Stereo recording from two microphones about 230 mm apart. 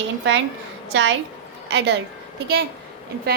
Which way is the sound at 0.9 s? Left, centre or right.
Right.